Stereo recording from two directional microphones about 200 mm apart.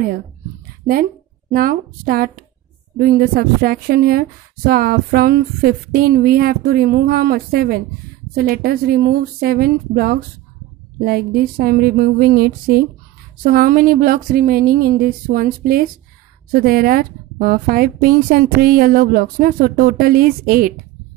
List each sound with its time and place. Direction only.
1.5 s speech: 45° right (ahead or behind)